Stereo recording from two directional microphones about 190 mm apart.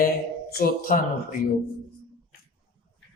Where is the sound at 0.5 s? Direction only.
50° left (ahead or behind).